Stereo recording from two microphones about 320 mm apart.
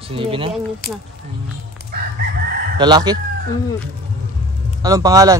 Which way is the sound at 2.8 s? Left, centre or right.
Centre.